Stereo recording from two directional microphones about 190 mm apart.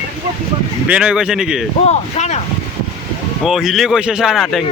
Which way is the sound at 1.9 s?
35° left (ahead or behind).